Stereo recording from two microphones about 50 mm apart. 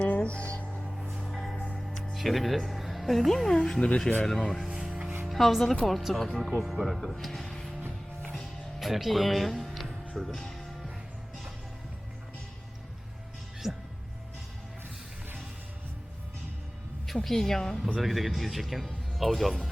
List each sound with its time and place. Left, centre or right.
0.0 s music: left
1.1 s music: centre
2.1 s a woman's voice: centre
4.7 s music: centre
5.3 s speech: centre
6.1 s a woman's voice: centre
6.4 s speech: centre
8.8 s a woman's voice: centre
13.6 s music: centre
17.2 s a woman's voice: centre